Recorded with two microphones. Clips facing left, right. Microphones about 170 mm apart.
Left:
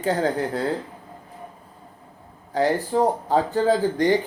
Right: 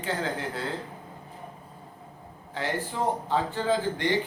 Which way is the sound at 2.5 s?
40° left (ahead or behind).